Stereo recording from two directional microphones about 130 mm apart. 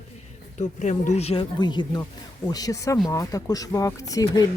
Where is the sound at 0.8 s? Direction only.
65° left (ahead or behind); by 1.5 s 50° left (ahead or behind).